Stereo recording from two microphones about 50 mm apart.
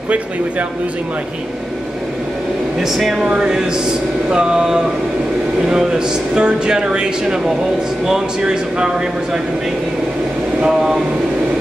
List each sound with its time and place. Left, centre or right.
2.8 s speech: centre